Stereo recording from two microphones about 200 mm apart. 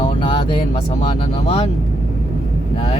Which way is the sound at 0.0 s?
30° left (ahead or behind).